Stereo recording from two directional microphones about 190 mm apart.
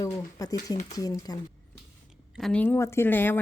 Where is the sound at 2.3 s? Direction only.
5° left (ahead or behind).